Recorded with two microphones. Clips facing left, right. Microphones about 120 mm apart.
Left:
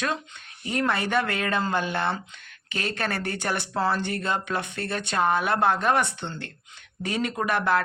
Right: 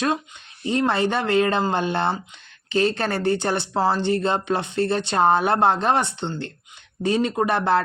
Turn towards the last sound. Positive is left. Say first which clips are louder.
# right 4 dB
turn(degrees=-30)  # may be behind; listen again after turning